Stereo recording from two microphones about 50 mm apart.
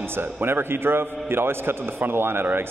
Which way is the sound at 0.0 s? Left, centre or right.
Right.